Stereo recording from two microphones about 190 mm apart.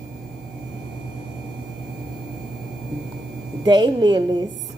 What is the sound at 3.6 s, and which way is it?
Speech, 20° right (ahead or behind).